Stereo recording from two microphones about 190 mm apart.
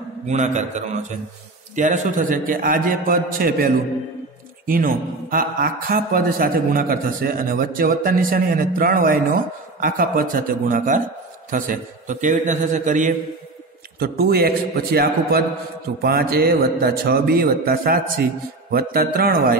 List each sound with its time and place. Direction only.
0.3 s a man's voice: 40° right (ahead or behind)
13.9 s a man's voice: 55° right (ahead or behind)